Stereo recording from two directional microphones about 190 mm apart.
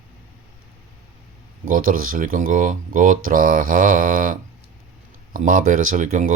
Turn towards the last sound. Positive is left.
turn(degrees=-40)  # may be behind; listen again after turning